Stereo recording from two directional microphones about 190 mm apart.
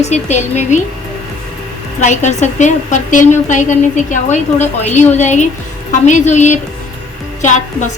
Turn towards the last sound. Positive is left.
turn(degrees=40)  # may be behind; listen again after turning